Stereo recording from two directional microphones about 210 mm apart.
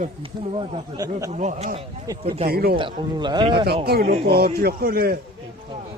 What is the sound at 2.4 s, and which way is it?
Speech, 45° right (ahead or behind).